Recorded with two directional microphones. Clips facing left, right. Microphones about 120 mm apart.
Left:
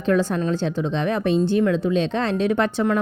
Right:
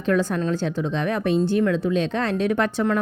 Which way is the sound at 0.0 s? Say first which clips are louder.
Left 1 dB; 25° left (ahead or behind).